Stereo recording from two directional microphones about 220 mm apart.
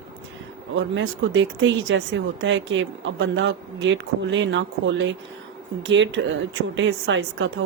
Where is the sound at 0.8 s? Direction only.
60° right (ahead or behind).